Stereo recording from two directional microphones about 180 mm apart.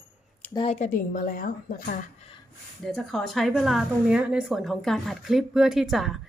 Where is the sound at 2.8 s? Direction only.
Centre (ahead or behind).